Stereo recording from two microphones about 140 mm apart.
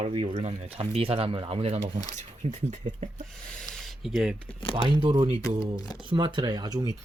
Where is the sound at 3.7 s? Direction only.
5° left (ahead or behind).